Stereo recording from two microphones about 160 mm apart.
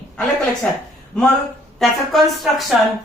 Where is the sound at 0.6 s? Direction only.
5° left (ahead or behind).